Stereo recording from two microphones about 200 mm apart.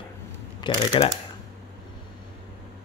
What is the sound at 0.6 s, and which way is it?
Speech, 25° left (ahead or behind).